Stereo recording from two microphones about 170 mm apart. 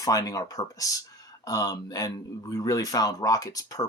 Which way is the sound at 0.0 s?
20° left (ahead or behind).